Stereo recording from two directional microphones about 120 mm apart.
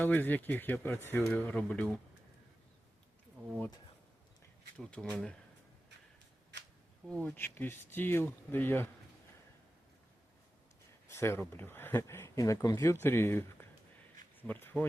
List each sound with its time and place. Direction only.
0.0 s speech: 15° left (ahead or behind)
4.8 s speech: 10° left (ahead or behind)
7.1 s speech: 10° left (ahead or behind)
11.1 s speech: 20° left (ahead or behind)